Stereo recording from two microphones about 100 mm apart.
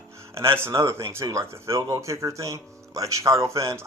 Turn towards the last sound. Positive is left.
turn(degrees=-30)  # may be behind; listen again after turning